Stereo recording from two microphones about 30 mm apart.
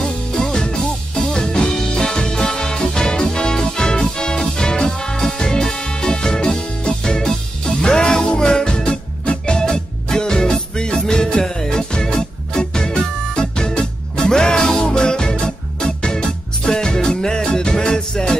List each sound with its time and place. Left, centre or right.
0.0 s music: left
9.2 s music: left
9.6 s music: left